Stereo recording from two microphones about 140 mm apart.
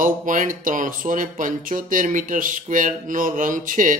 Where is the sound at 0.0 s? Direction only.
70° right (ahead or behind).